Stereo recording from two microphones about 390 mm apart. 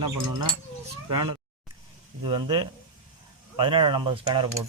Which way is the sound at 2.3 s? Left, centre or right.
Centre.